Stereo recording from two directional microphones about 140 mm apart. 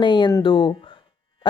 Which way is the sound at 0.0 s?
35° left (ahead or behind).